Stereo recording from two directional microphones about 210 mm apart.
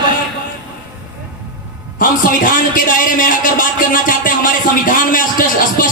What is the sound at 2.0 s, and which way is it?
A man's voice, 40° left (ahead or behind).